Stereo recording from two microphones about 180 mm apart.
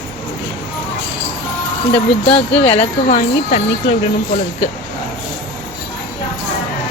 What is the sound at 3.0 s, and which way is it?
Speech, 40° left (ahead or behind).